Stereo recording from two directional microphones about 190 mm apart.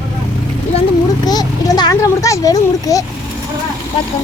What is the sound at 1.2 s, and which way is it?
A child's voice, 20° left (ahead or behind).